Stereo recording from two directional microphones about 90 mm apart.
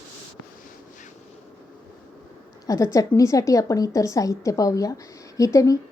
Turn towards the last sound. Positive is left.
turn(degrees=40)  # may be behind; listen again after turning